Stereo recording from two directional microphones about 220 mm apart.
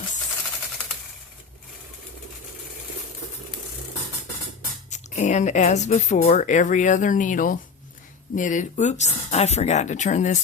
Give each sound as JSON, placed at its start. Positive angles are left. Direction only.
{"t": 4.9, "sound": "speech", "side_deg": 35}